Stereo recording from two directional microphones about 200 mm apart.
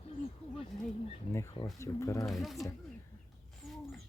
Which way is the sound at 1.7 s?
15° left (ahead or behind).